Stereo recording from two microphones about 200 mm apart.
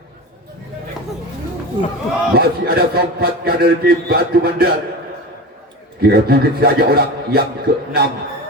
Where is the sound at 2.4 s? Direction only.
50° right (ahead or behind).